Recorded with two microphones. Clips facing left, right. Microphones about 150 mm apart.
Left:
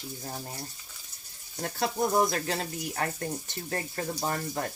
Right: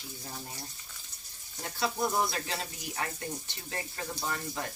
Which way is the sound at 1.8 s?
45° left (ahead or behind).